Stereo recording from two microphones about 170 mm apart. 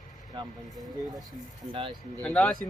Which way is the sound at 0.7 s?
Centre (ahead or behind).